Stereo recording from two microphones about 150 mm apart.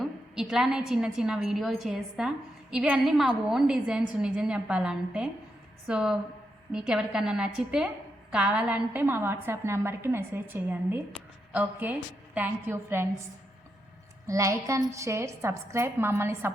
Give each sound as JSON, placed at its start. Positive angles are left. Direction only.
{"t": 0.0, "sound": "a woman's voice", "side_deg": -5}
{"t": 14.3, "sound": "a woman's voice", "side_deg": -20}